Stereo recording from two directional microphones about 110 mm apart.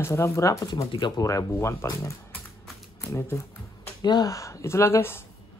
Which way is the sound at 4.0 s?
40° left (ahead or behind).